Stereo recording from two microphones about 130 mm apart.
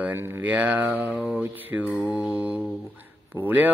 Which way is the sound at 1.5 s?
15° right (ahead or behind).